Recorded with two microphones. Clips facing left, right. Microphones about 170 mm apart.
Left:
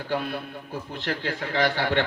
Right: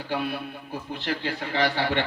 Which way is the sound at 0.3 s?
50° left (ahead or behind).